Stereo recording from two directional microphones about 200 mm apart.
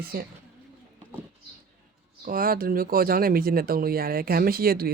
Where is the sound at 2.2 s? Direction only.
45° right (ahead or behind).